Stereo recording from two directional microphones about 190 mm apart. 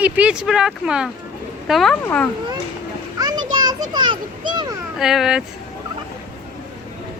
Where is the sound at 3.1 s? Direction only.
20° right (ahead or behind).